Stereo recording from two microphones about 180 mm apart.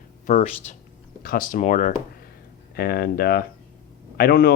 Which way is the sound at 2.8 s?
55° left (ahead or behind).